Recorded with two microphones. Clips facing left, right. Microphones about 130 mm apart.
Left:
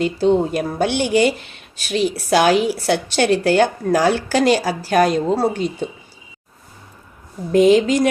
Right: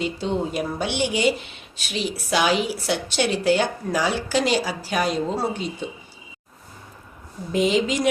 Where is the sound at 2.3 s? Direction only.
50° left (ahead or behind).